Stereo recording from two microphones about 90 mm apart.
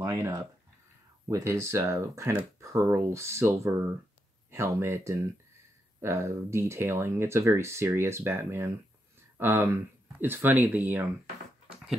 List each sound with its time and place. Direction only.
0.0 s speech: 35° right (ahead or behind); by 10.8 s 20° right (ahead or behind)
11.7 s dog: 5° right (ahead or behind)